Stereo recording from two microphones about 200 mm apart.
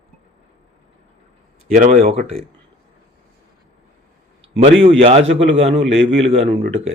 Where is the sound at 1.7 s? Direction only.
40° right (ahead or behind).